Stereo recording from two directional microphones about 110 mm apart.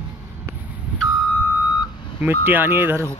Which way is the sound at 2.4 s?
20° right (ahead or behind).